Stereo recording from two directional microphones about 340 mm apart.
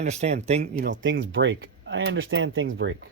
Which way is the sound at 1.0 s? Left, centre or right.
Right.